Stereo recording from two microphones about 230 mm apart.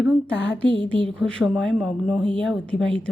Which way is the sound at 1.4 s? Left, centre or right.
Centre.